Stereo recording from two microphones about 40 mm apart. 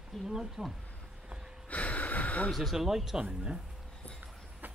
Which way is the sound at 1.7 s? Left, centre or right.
Left.